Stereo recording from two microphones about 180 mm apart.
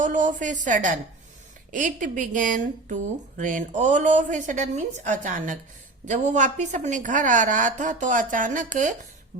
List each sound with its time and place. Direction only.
0.0 s speech: 45° right (ahead or behind)
9.3 s beatboxing: 50° right (ahead or behind)